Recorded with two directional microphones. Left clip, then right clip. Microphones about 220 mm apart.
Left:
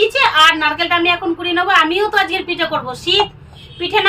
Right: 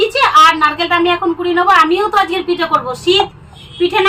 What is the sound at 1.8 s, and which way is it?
A woman's voice, 5° left (ahead or behind).